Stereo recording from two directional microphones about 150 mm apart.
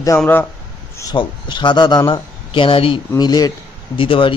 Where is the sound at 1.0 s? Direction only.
30° left (ahead or behind).